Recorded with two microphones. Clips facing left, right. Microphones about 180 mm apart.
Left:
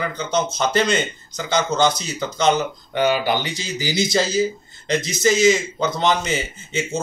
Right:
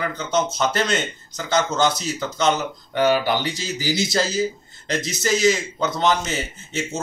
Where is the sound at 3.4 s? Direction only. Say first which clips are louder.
Even; 5° right (ahead or behind).